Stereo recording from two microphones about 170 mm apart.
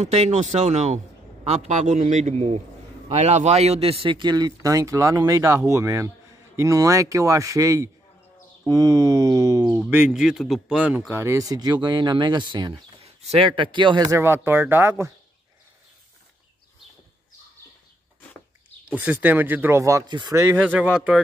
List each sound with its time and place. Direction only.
0.0 s a man's voice: 40° right (ahead or behind); by 15.1 s 15° right (ahead or behind)
19.0 s speech: 10° right (ahead or behind)